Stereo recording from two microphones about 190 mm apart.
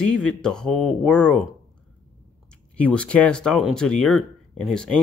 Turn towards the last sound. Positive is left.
turn(degrees=5)  # may be behind; listen again after turning